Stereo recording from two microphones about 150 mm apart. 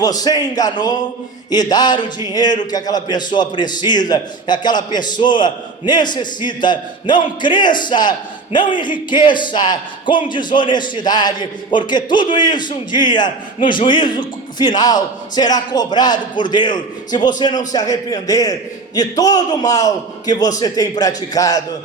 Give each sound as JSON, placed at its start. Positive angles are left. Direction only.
{"t": 0.0, "sound": "a man's voice", "side_deg": 25}